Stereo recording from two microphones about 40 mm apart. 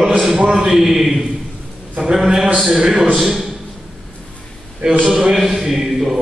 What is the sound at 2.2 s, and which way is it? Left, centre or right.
Speech, centre.